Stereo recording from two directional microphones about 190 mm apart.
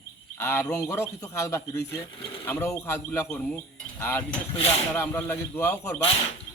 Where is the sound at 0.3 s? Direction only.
10° left (ahead or behind).